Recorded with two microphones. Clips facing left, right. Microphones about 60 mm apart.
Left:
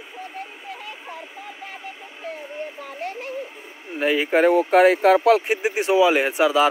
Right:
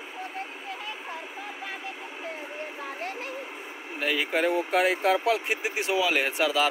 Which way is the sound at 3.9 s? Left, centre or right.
Left.